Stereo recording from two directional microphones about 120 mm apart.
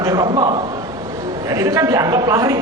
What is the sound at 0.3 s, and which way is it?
Speech, 40° right (ahead or behind).